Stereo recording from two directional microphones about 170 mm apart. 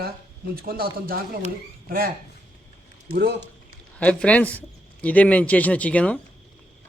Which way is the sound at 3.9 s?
5° left (ahead or behind).